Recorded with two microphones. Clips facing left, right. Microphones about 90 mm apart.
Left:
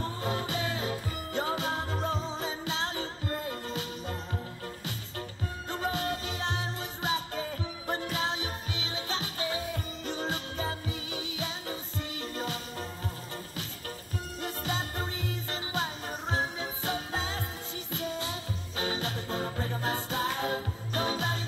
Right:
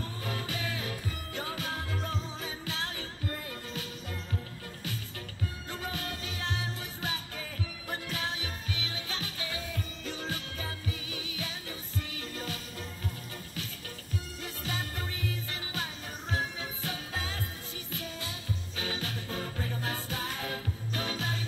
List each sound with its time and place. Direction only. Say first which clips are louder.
0.0 s music: left 5 dB; 30° left (ahead or behind)
5.7 s music: left 9 dB; 30° left (ahead or behind)
14.4 s music: left 6 dB; 30° left (ahead or behind)